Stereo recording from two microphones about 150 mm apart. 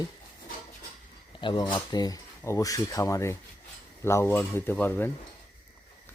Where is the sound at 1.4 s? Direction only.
30° left (ahead or behind); by 5.1 s 15° left (ahead or behind).